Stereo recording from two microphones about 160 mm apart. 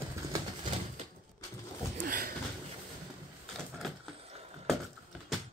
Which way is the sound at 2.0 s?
60° right (ahead or behind).